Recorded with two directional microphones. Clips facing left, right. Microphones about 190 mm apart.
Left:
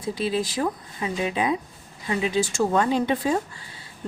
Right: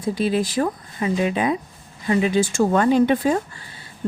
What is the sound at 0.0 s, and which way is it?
Speech, 50° right (ahead or behind).